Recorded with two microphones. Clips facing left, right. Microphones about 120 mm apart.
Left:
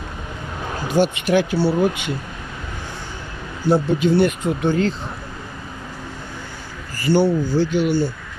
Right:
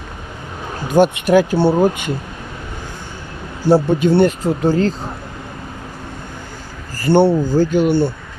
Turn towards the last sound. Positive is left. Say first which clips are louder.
# right 4 dB
turn(degrees=-45)  # may be behind; listen again after turning